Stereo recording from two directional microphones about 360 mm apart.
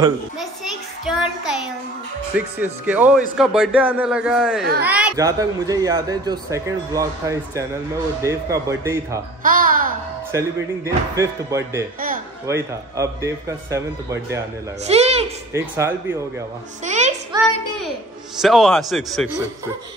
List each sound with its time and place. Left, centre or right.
1.0 s speech: centre
9.4 s babbling: right
10.3 s speech: centre
15.6 s speech: centre
16.8 s a sound: centre
18.4 s speech: centre